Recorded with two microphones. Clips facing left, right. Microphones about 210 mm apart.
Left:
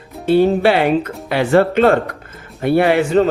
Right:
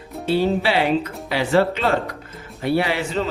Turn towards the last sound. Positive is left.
turn(degrees=55)  # may be behind; listen again after turning